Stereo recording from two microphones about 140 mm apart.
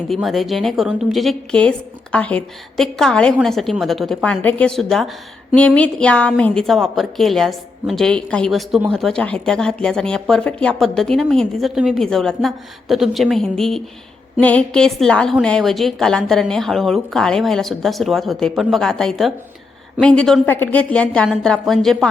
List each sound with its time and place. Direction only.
0.1 s a woman's voice: centre (ahead or behind)